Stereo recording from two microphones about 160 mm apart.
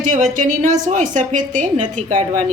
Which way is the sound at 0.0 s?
50° right (ahead or behind).